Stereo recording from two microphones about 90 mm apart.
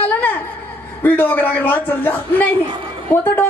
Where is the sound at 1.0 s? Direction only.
20° left (ahead or behind).